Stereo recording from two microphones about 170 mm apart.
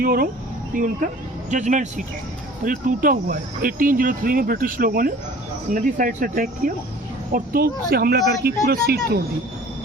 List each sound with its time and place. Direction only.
0.0 s speech: 60° right (ahead or behind)